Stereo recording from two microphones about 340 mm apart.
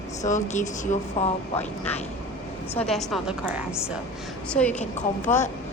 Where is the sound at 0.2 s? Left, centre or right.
Left.